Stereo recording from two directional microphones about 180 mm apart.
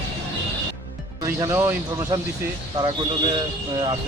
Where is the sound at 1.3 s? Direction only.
15° right (ahead or behind).